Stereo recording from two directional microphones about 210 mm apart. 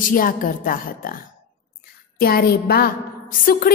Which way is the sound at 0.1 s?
40° left (ahead or behind).